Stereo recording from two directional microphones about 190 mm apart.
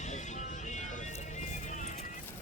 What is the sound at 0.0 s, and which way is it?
Music, 40° left (ahead or behind).